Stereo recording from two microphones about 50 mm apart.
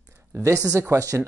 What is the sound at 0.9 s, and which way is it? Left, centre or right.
Speech, right.